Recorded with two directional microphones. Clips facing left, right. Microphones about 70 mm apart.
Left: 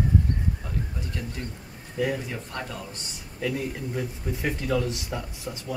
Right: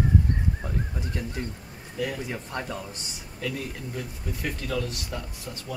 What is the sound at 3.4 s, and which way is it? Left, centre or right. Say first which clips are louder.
Speech: left 4 dB; centre.